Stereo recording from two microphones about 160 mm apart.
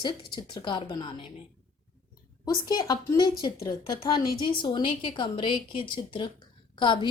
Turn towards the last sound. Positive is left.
turn(degrees=30)  # may be behind; listen again after turning